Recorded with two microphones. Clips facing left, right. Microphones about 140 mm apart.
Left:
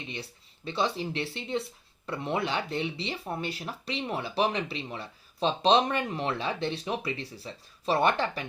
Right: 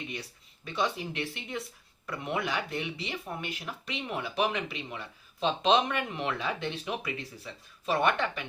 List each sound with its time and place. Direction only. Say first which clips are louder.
0.1 s speech: left 1 dB; 30° left (ahead or behind)